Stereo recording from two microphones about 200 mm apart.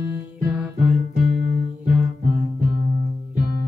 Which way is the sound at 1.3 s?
55° right (ahead or behind).